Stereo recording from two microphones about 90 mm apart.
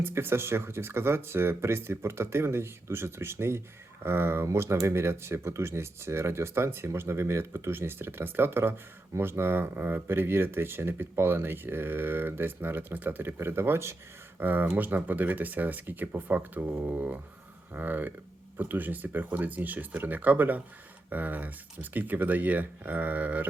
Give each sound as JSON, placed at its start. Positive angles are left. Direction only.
{"t": 0.0, "sound": "speech", "side_deg": -25}